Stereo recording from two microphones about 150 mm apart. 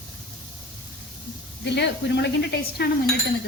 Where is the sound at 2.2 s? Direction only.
90° left.